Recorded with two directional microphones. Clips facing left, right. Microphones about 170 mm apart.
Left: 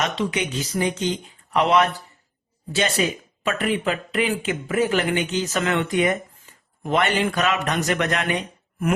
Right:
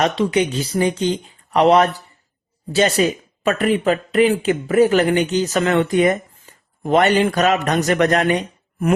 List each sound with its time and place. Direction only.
0.0 s speech: 35° right (ahead or behind)
3.0 s speech: 40° right (ahead or behind)